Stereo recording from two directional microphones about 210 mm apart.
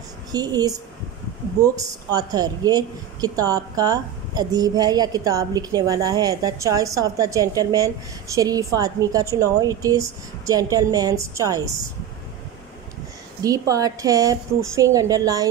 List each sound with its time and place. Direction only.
0.3 s a woman's voice: 20° right (ahead or behind)
2.1 s a woman's voice: 20° right (ahead or behind)
13.4 s a woman's voice: 15° right (ahead or behind)